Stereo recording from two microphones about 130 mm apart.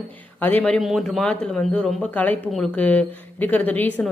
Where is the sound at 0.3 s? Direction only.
15° left (ahead or behind).